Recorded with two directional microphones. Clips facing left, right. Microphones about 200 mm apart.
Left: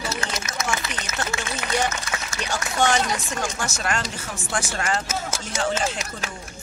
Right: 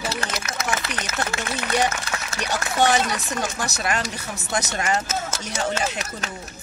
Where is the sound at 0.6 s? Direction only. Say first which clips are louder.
Right 1 dB; 60° right (ahead or behind).